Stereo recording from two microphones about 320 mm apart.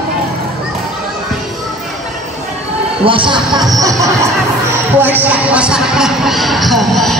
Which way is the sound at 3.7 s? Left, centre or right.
Centre.